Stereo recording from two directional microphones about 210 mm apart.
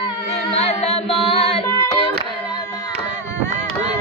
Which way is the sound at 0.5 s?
30° left (ahead or behind).